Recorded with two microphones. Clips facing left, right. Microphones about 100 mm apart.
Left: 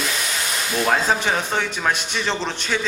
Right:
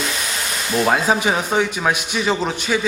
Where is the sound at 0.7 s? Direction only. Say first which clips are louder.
Right 3 dB; 10° right (ahead or behind).